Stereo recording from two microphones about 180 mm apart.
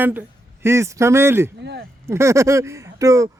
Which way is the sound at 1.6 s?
70° right (ahead or behind).